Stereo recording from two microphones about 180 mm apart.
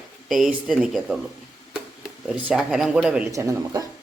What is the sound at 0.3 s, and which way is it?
Speech, centre (ahead or behind).